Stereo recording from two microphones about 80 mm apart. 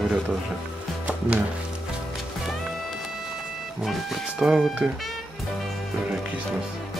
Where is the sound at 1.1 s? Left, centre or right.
Centre.